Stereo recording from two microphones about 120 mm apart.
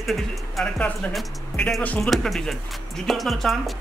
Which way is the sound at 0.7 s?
10° left (ahead or behind).